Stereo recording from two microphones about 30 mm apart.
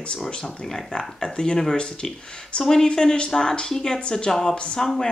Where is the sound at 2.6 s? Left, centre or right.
Centre.